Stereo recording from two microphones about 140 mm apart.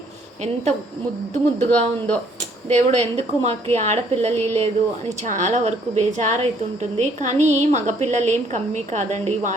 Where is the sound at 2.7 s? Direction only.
55° right (ahead or behind).